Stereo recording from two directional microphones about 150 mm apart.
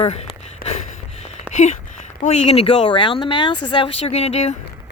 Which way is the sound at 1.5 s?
50° left (ahead or behind).